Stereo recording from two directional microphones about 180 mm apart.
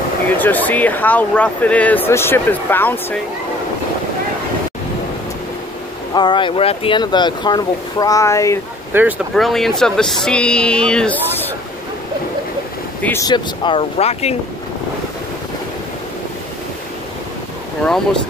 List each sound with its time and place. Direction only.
0.4 s speech: 10° left (ahead or behind)
6.1 s speech: 25° left (ahead or behind)
8.9 s speech: 10° right (ahead or behind)
9.3 s speech: centre (ahead or behind)
13.0 s speech: 15° left (ahead or behind)
13.3 s speech: 30° left (ahead or behind)